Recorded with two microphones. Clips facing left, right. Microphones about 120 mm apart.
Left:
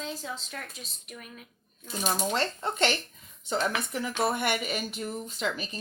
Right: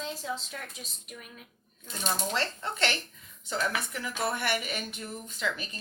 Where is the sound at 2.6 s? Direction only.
30° left (ahead or behind).